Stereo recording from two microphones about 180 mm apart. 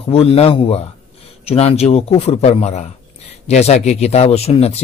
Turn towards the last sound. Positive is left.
turn(degrees=35)  # may be behind; listen again after turning